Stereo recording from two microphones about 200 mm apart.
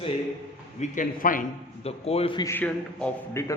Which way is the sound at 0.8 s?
40° left (ahead or behind).